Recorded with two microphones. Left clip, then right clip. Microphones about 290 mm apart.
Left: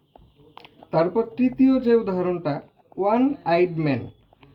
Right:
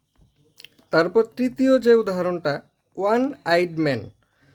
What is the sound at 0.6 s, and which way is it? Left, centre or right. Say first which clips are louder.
Speech: right 2 dB; right.